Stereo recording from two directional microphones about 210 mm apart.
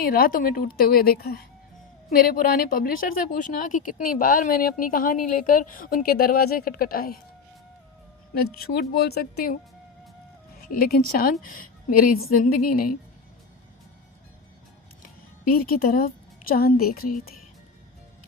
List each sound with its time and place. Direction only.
0.0 s a woman's voice: 45° left (ahead or behind)
8.4 s a woman's voice: 45° left (ahead or behind)
10.6 s a woman's voice: 45° left (ahead or behind)
15.0 s music: 45° left (ahead or behind)
16.9 s a woman's voice: 45° left (ahead or behind)